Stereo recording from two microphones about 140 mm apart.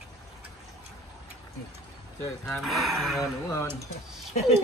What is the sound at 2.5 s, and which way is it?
Speech, centre (ahead or behind).